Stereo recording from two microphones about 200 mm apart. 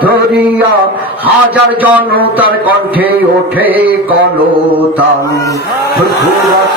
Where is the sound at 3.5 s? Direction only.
10° right (ahead or behind).